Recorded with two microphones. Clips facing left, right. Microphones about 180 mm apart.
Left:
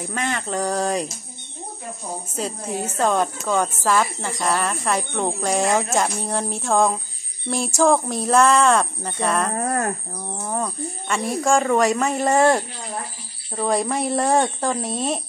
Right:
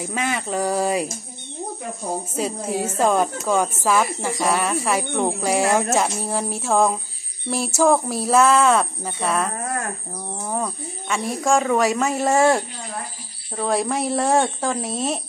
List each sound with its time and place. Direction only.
0.0 s a woman's voice: 5° right (ahead or behind)
2.3 s a woman's voice: 5° right (ahead or behind)
9.6 s speech: 40° left (ahead or behind)
10.1 s speech: 5° right (ahead or behind)